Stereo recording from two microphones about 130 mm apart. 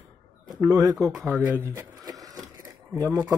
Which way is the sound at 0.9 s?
Centre (ahead or behind).